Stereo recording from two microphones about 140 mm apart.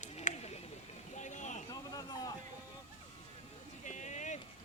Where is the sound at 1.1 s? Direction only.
60° left (ahead or behind).